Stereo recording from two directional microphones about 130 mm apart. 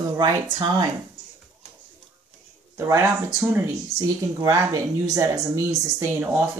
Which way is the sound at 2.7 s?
25° right (ahead or behind).